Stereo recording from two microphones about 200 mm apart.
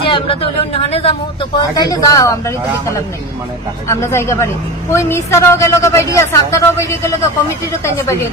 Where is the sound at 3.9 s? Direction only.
15° left (ahead or behind).